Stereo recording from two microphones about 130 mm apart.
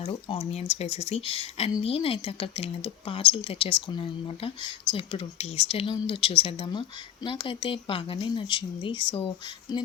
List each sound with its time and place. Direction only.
0.0 s speech: 45° left (ahead or behind)